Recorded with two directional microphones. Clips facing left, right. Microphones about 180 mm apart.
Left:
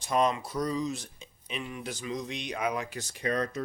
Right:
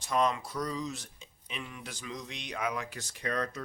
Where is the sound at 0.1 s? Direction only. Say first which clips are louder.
Left 2 dB; 20° left (ahead or behind).